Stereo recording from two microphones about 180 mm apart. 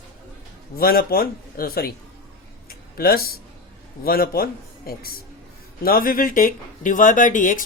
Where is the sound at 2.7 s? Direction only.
55° left (ahead or behind).